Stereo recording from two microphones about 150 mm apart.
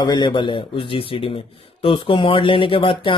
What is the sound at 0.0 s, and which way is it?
Speech, 30° left (ahead or behind).